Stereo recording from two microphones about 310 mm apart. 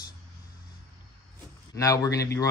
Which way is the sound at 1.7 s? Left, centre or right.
Centre.